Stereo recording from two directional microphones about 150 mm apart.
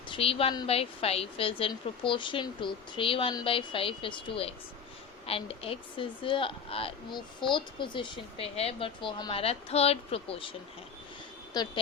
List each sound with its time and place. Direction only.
0.1 s a woman's voice: 40° left (ahead or behind)
9.4 s a woman's voice: 40° left (ahead or behind)
11.5 s speech: 30° left (ahead or behind)